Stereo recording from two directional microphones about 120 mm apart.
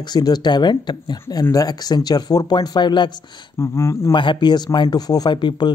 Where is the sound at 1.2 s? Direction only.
25° left (ahead or behind).